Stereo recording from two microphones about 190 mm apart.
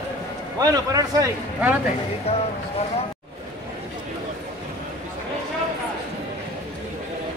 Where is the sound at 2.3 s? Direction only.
35° left (ahead or behind).